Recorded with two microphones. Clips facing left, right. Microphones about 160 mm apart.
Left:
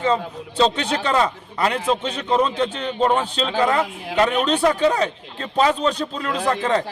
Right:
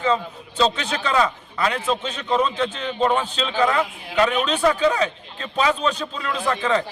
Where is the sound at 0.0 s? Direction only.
30° left (ahead or behind).